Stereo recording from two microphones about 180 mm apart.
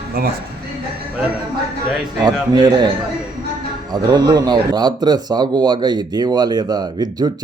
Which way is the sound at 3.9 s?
20° right (ahead or behind).